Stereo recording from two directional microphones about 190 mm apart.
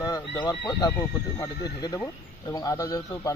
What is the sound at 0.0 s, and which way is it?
A man's voice, 20° left (ahead or behind).